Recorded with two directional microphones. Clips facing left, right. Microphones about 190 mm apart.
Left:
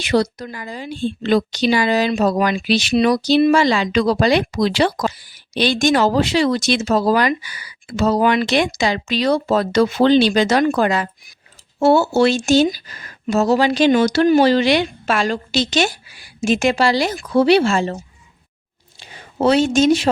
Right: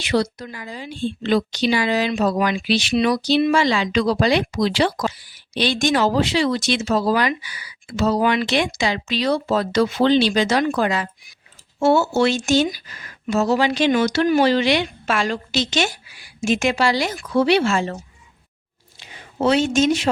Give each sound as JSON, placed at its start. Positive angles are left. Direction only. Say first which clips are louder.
{"t": 0.0, "sound": "a woman's voice", "louder": "left 3 dB", "side_deg": 45}
{"t": 11.8, "sound": "speech", "louder": "left 3 dB", "side_deg": 35}
{"t": 18.9, "sound": "a sound", "louder": "left 3 dB", "side_deg": 40}